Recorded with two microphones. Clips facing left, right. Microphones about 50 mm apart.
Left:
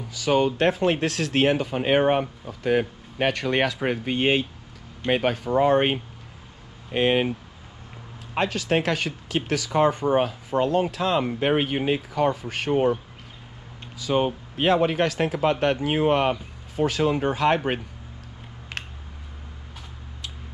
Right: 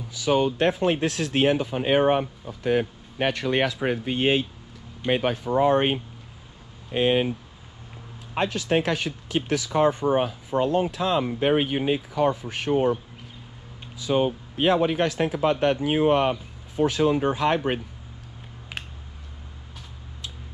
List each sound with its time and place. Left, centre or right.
0.2 s speech: left
3.2 s speech: left
5.0 s speech: left
5.6 s speech: left
8.4 s speech: left
14.0 s speech: left
18.7 s a sound: centre